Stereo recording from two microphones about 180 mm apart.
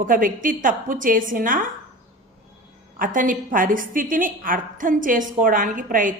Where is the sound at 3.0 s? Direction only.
50° right (ahead or behind).